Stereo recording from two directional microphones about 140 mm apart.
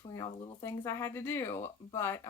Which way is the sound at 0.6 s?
20° left (ahead or behind).